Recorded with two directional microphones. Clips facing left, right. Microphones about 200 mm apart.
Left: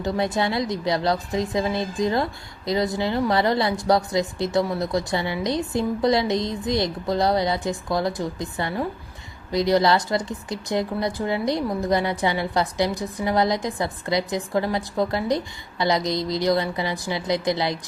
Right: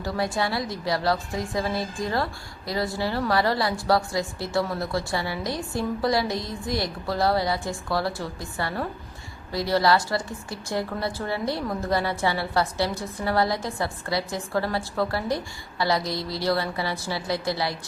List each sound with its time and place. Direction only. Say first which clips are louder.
0.0 s a woman's voice: left 3 dB; 20° left (ahead or behind)